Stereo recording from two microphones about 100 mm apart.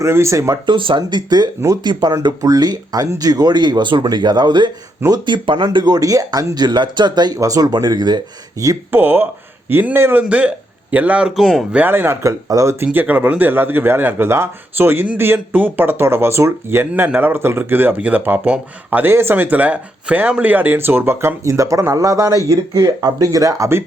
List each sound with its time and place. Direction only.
0.0 s speech: 30° right (ahead or behind)
0.6 s speech: 55° right (ahead or behind); by 8.8 s 35° right (ahead or behind)
8.9 s a man's voice: 20° right (ahead or behind)
11.3 s speech: centre (ahead or behind)
11.7 s speech: 20° right (ahead or behind)
12.5 s speech: 35° right (ahead or behind)
12.8 s speech: 20° right (ahead or behind)